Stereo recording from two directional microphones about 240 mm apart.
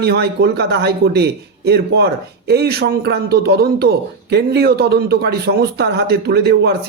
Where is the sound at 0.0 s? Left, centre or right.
Right.